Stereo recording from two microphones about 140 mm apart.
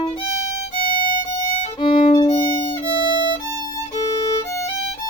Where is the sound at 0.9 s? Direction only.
90° left.